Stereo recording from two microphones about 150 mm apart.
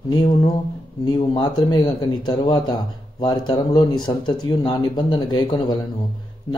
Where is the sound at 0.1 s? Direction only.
30° left (ahead or behind).